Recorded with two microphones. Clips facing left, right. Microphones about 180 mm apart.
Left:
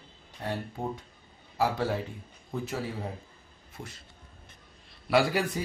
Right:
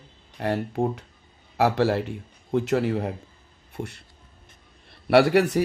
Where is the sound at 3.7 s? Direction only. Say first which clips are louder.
Right 10 dB; 65° right (ahead or behind).